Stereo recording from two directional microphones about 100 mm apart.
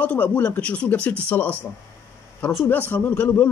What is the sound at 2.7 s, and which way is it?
Speech, 20° left (ahead or behind).